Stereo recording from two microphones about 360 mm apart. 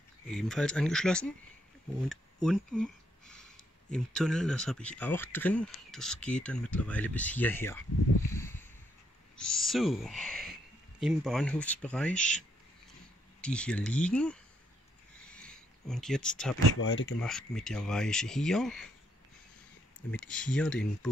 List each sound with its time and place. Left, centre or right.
0.3 s speech: centre
8.4 s a sound: centre
9.4 s speech: centre
15.2 s a sound: centre
16.8 s speech: left
17.2 s speech: centre
20.1 s speech: centre